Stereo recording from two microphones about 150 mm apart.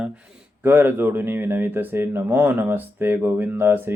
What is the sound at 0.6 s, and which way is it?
Speech, 15° right (ahead or behind).